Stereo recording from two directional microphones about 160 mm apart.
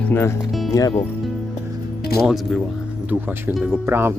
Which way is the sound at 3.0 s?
10° right (ahead or behind).